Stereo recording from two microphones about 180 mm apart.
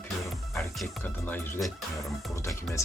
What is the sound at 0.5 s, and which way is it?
Speech, centre (ahead or behind).